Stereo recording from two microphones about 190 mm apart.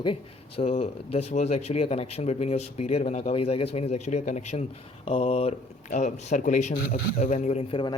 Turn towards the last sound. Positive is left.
turn(degrees=25)  # may be behind; listen again after turning